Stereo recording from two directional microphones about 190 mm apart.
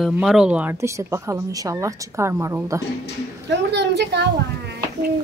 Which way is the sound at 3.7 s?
65° right (ahead or behind).